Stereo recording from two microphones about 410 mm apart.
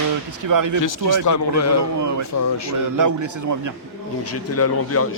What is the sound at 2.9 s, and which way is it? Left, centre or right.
Speech, right.